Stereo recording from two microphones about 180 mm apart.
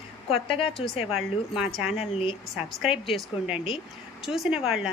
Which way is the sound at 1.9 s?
30° left (ahead or behind).